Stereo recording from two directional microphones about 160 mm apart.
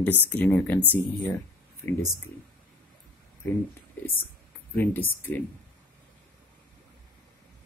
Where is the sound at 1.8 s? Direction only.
10° left (ahead or behind).